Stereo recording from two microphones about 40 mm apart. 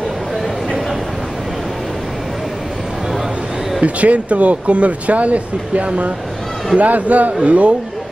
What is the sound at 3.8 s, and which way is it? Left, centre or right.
A man's voice, right.